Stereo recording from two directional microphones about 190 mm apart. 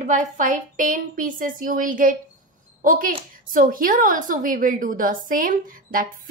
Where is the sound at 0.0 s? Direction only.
40° right (ahead or behind).